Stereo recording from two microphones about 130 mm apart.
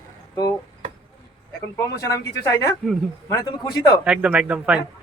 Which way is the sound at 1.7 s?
25° left (ahead or behind).